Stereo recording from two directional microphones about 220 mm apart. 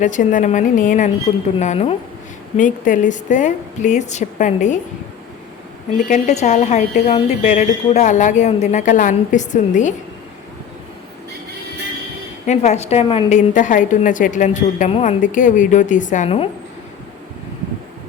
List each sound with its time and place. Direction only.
0.0 s a woman's voice: 35° left (ahead or behind)
6.1 s a woman's voice: 30° left (ahead or behind)
12.5 s a woman's voice: 30° left (ahead or behind)